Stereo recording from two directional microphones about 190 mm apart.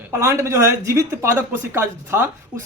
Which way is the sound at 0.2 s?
15° right (ahead or behind).